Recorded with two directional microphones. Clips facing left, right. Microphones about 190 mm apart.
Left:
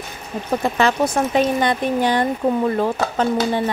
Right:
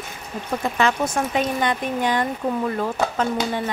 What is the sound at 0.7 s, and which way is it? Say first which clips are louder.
Speech: left 2 dB; 35° left (ahead or behind).